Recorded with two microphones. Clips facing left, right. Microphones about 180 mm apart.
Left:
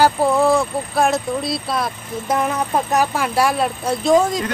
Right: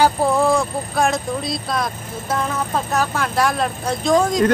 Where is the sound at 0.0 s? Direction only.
Centre (ahead or behind).